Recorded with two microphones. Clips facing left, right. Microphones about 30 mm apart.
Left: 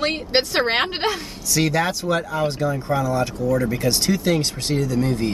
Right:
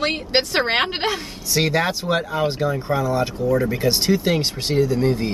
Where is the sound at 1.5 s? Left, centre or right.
Centre.